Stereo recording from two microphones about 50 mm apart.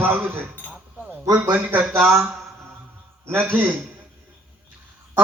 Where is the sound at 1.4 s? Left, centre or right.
Right.